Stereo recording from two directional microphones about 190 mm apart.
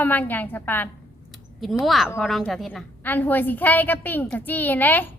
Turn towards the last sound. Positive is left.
turn(degrees=10)  # may be behind; listen again after turning